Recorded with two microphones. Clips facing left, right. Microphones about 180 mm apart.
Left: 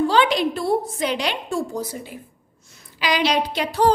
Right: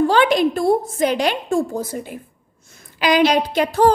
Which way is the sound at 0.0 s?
50° right (ahead or behind).